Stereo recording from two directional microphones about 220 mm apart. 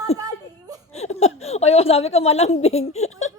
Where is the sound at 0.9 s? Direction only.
30° left (ahead or behind).